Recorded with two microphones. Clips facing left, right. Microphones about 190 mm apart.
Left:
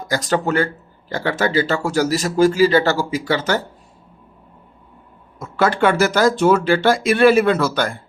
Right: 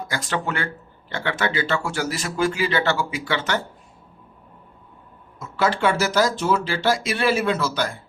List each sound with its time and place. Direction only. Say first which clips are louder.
0.1 s speech: left 9 dB; 40° left (ahead or behind)
5.4 s speech: left 4 dB; 55° left (ahead or behind)